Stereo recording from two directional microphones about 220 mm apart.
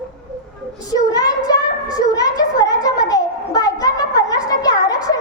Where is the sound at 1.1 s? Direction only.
15° left (ahead or behind).